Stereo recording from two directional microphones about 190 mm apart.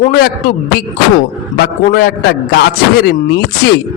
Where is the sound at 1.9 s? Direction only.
55° left (ahead or behind).